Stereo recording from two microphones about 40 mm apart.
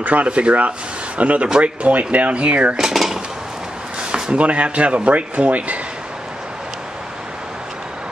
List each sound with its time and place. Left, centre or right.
0.0 s speech: right
2.8 s speech: centre
4.1 s speech: right